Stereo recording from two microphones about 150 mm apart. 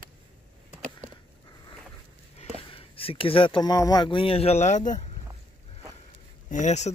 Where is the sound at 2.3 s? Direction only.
40° left (ahead or behind).